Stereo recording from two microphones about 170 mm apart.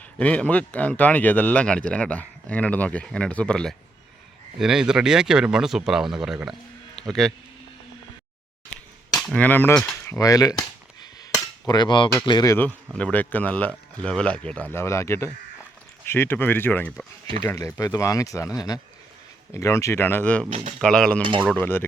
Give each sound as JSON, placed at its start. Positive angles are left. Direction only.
{"t": 0.2, "sound": "speech", "side_deg": 10}
{"t": 9.1, "sound": "speech", "side_deg": 5}
{"t": 10.1, "sound": "a sound", "side_deg": 20}
{"t": 11.7, "sound": "speech", "side_deg": 25}
{"t": 13.0, "sound": "speech", "side_deg": 10}
{"t": 21.2, "sound": "speech", "side_deg": -30}
{"t": 21.6, "sound": "speech", "side_deg": 10}